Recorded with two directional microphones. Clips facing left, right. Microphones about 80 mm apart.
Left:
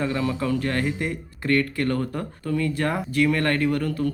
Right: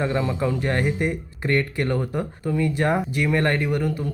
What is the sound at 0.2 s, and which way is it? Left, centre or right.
Speech, centre.